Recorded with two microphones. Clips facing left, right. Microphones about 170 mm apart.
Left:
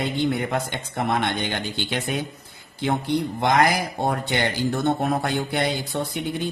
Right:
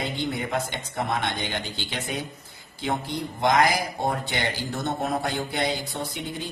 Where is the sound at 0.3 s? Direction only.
60° left (ahead or behind).